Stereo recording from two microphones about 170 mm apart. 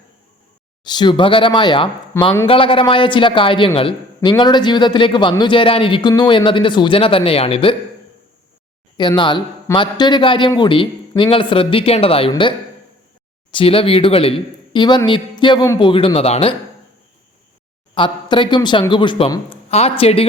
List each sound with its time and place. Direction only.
0.9 s speech: 25° left (ahead or behind)
9.0 s speech: 25° left (ahead or behind)
15.9 s speech: 30° left (ahead or behind)
17.9 s speech: 30° left (ahead or behind)